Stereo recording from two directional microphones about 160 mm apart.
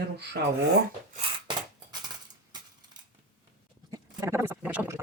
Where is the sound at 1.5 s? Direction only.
30° right (ahead or behind).